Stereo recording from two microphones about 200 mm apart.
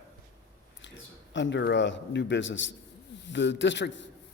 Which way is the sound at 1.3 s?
65° left (ahead or behind).